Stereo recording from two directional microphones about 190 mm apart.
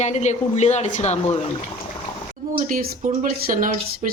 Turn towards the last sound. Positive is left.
turn(degrees=-45)  # may be behind; listen again after turning